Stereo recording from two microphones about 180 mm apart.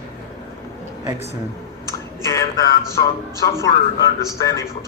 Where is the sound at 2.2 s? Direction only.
20° left (ahead or behind).